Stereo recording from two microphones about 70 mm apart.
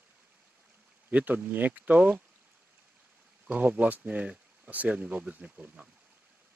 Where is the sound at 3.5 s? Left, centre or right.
Right.